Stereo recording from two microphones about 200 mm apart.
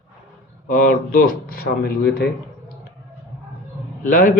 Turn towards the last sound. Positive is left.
turn(degrees=40)  # may be behind; listen again after turning